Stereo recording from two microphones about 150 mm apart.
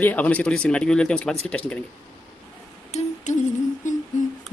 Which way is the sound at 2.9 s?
50° left (ahead or behind).